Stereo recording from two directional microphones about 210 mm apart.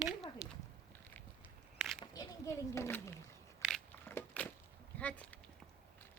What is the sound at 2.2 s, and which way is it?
Speech, 15° left (ahead or behind).